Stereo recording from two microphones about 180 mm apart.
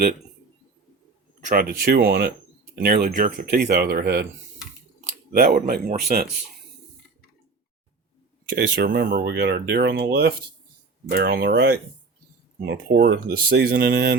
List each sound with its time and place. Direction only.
1.5 s speech: 55° right (ahead or behind)
5.3 s speech: 55° right (ahead or behind)
8.5 s speech: 70° right (ahead or behind)
11.1 s speech: 60° right (ahead or behind)